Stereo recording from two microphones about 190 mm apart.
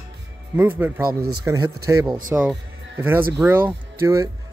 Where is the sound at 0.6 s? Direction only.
10° right (ahead or behind).